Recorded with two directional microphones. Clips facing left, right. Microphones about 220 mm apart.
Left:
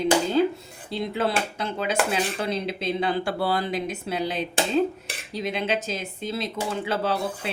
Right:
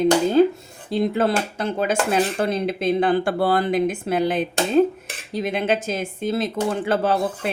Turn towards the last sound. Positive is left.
turn(degrees=-50)  # may be behind; listen again after turning